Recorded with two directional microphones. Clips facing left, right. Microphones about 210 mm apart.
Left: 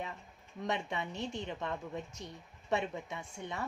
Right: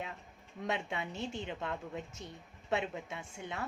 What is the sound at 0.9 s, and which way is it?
A woman's voice, 5° right (ahead or behind).